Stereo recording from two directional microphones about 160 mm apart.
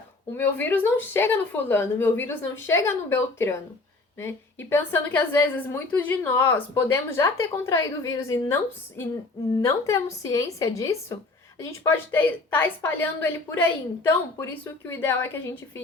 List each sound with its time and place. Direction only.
0.3 s speech: 15° left (ahead or behind)
4.2 s speech: 15° left (ahead or behind)